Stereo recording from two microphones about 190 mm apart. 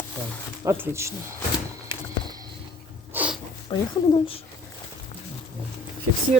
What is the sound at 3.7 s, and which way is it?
Speech, 25° left (ahead or behind).